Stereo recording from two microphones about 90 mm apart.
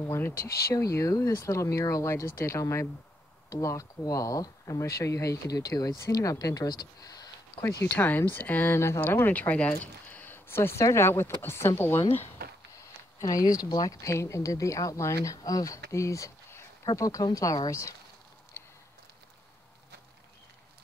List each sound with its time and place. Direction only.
0.0 s speech: 30° left (ahead or behind); by 7.2 s 45° left (ahead or behind)
7.9 s speech: 20° left (ahead or behind)
13.2 s speech: 40° left (ahead or behind)
14.0 s speech: 35° left (ahead or behind)
18.6 s a sound: 30° left (ahead or behind)